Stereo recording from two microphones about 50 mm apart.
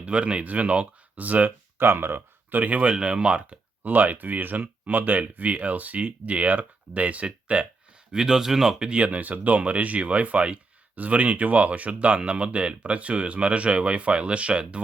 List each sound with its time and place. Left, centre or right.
0.0 s speech: right
1.8 s speech: right
8.1 s speech: centre
8.9 s speech: right